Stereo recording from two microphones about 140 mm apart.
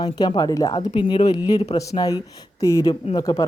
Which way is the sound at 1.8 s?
25° left (ahead or behind).